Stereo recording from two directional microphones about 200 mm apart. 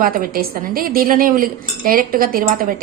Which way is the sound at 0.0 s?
45° right (ahead or behind).